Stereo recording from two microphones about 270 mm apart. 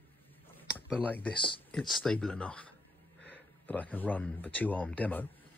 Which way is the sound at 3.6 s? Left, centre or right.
Centre.